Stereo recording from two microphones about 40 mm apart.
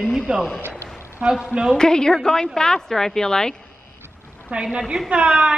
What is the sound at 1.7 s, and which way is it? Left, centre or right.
Speech, centre.